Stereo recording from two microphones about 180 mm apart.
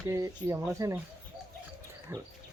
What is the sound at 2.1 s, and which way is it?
Speech, 10° right (ahead or behind).